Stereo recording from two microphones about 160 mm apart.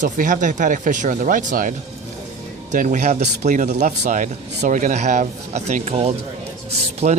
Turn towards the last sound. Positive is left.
turn(degrees=-40)  # may be behind; listen again after turning